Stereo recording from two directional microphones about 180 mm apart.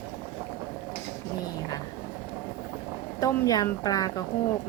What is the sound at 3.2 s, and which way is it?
Speech, 20° left (ahead or behind).